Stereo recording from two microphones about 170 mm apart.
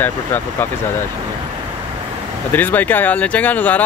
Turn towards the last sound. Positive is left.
turn(degrees=10)  # may be behind; listen again after turning